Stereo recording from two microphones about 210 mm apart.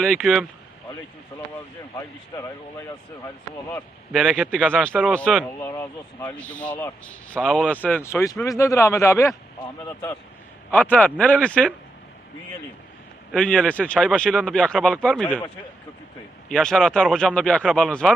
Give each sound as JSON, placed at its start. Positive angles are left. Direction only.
{"t": 0.0, "sound": "speech", "side_deg": 0}
{"t": 2.0, "sound": "speech", "side_deg": 15}
{"t": 4.1, "sound": "speech", "side_deg": 0}
{"t": 5.5, "sound": "speech", "side_deg": 15}
{"t": 10.7, "sound": "speech", "side_deg": 5}
{"t": 13.3, "sound": "speech", "side_deg": 5}
{"t": 16.5, "sound": "speech", "side_deg": 5}